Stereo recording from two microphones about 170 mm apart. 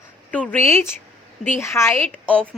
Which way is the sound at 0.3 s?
10° left (ahead or behind).